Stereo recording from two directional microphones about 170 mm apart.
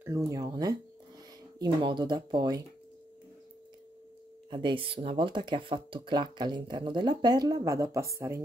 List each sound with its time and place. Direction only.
0.0 s speech: 20° right (ahead or behind)
4.5 s speech: 30° right (ahead or behind)